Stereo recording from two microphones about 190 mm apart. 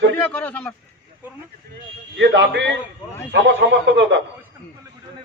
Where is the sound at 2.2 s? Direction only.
70° right (ahead or behind).